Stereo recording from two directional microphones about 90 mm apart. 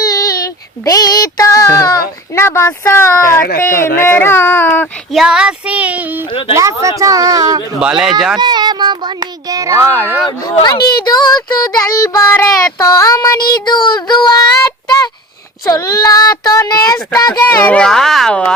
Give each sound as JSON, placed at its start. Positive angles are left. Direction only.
{"t": 0.0, "sound": "child singing", "side_deg": 40}
{"t": 3.6, "sound": "speech", "side_deg": 25}
{"t": 5.1, "sound": "speech", "side_deg": -5}
{"t": 6.5, "sound": "speech", "side_deg": -35}
{"t": 7.8, "sound": "speech", "side_deg": -5}
{"t": 8.4, "sound": "a sound", "side_deg": -55}
{"t": 10.4, "sound": "child singing", "side_deg": 50}
{"t": 14.8, "sound": "a sound", "side_deg": 45}
{"t": 15.6, "sound": "speech", "side_deg": 40}
{"t": 17.5, "sound": "speech", "side_deg": 25}
{"t": 17.7, "sound": "speech", "side_deg": 5}